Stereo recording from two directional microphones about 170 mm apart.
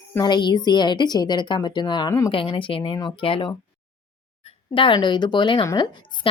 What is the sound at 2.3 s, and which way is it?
A woman's voice, 30° left (ahead or behind).